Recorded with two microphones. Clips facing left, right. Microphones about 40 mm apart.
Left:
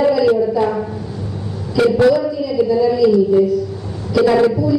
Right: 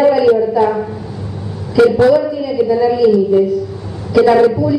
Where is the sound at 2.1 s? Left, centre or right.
Right.